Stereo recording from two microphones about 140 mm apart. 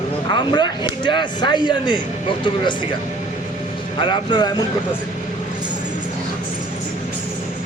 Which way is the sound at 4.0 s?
35° left (ahead or behind).